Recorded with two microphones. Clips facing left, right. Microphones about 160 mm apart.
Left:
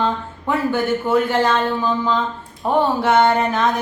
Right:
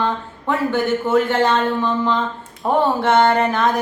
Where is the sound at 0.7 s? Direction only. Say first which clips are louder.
Even; centre (ahead or behind).